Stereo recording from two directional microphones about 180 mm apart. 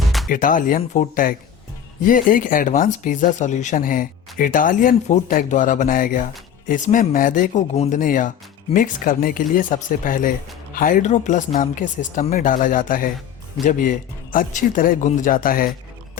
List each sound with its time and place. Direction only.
0.3 s speech: 50° left (ahead or behind)
14.3 s speech: 45° left (ahead or behind)